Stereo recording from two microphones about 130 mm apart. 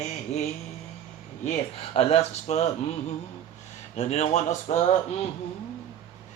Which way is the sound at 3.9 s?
60° left (ahead or behind).